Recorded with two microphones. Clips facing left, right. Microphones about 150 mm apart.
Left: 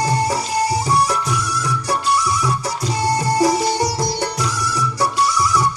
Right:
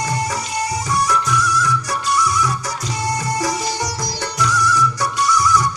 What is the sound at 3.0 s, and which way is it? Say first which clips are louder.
Music: left 5 dB; 30° left (ahead or behind).